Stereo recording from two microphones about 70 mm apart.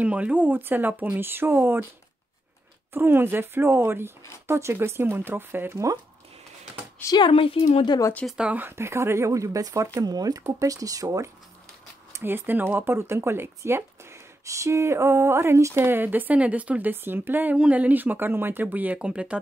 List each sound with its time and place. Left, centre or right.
0.0 s speech: centre
2.9 s speech: right
7.1 s speech: left
8.4 s speech: centre
8.6 s speech: right
10.0 s speech: right
12.2 s speech: right